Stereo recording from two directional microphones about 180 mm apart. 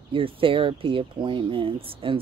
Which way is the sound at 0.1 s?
30° right (ahead or behind).